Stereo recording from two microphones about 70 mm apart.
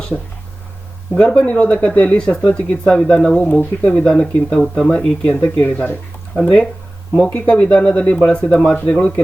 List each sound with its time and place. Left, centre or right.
0.1 s speech: centre
5.2 s speech: left